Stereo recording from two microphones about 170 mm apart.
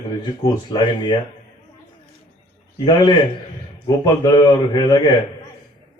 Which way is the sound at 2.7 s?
25° left (ahead or behind).